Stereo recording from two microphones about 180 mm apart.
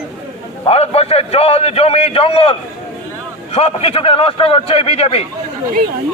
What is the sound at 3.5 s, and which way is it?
A man's voice, 35° left (ahead or behind).